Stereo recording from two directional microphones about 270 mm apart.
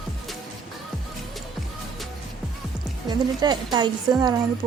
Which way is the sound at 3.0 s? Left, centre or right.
Centre.